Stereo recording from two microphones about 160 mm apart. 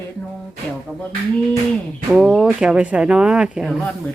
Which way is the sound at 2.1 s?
5° right (ahead or behind).